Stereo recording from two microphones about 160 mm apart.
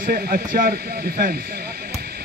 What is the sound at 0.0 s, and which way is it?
Speech, 65° right (ahead or behind).